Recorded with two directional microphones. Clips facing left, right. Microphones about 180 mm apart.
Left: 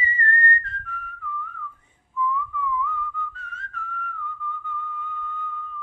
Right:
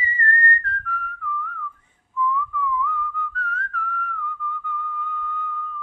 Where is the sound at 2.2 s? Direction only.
20° left (ahead or behind).